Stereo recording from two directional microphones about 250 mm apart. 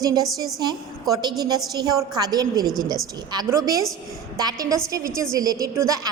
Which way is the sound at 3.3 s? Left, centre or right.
Centre.